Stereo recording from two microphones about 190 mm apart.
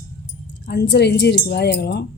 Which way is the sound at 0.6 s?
60° left (ahead or behind).